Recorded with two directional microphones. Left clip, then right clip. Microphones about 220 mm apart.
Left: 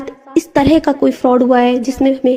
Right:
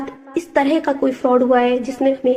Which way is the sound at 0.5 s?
45° left (ahead or behind).